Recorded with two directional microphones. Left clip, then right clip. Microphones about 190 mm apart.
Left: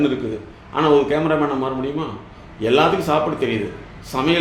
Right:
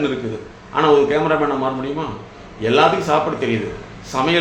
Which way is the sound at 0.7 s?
30° left (ahead or behind).